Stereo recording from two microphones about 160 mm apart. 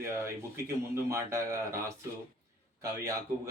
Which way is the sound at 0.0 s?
15° right (ahead or behind).